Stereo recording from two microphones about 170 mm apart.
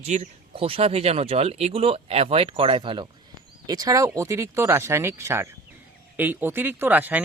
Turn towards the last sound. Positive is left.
turn(degrees=-10)  # may be behind; listen again after turning